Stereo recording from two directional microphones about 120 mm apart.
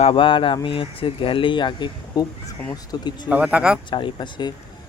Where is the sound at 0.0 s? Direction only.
45° left (ahead or behind).